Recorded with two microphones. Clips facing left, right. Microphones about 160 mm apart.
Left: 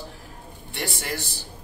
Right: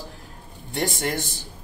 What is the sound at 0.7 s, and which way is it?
Speech, 45° right (ahead or behind).